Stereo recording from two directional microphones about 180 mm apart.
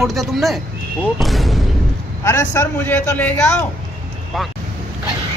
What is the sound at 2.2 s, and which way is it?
A man's voice, 15° left (ahead or behind).